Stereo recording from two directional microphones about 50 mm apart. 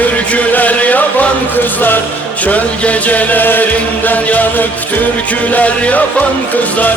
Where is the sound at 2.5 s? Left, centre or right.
Left.